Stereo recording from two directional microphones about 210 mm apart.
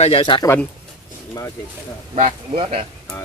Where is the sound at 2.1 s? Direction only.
30° right (ahead or behind).